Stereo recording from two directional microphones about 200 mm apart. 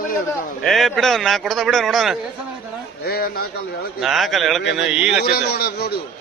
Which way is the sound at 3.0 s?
50° left (ahead or behind).